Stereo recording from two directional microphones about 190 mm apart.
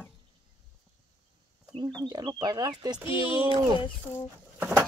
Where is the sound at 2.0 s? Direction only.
20° right (ahead or behind).